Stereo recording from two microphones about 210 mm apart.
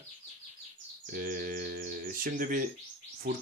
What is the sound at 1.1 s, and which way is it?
Speech, 40° right (ahead or behind).